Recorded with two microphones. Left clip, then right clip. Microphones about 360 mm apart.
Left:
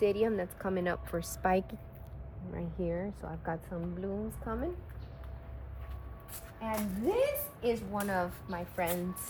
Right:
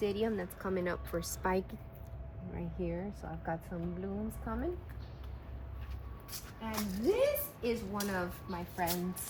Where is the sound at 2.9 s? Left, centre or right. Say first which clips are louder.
Left 4 dB; left.